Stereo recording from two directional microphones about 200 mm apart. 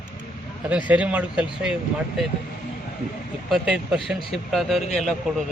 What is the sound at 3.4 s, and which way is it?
Speech, centre (ahead or behind).